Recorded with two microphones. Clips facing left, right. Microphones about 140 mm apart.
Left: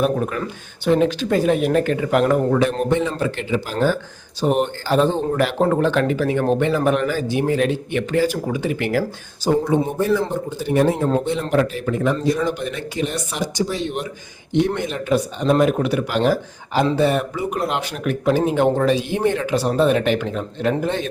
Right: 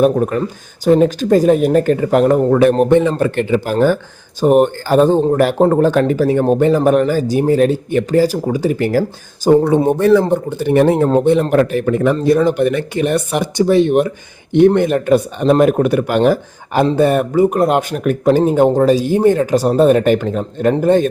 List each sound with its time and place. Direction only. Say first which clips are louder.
0.0 s speech: right 7 dB; 40° right (ahead or behind)
9.6 s speech: right 7 dB; 65° right (ahead or behind); by 21.1 s 45° right (ahead or behind)